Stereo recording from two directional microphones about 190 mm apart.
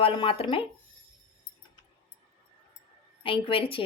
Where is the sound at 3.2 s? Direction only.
25° left (ahead or behind).